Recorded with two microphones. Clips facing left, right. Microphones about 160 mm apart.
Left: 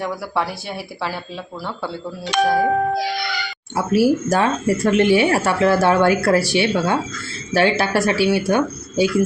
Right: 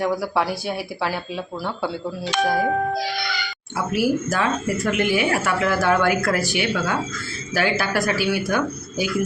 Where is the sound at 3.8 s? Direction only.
35° left (ahead or behind).